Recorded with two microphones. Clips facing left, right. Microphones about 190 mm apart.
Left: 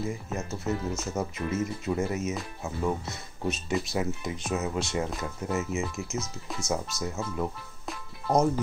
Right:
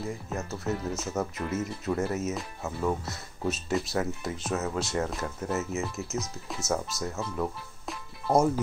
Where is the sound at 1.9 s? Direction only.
15° left (ahead or behind).